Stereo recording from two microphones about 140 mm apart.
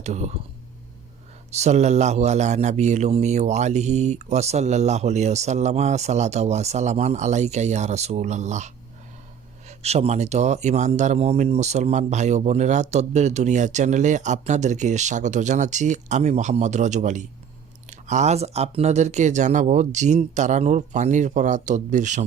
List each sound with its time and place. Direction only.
0.0 s a man's voice: 55° right (ahead or behind)
1.5 s a man's voice: 55° right (ahead or behind)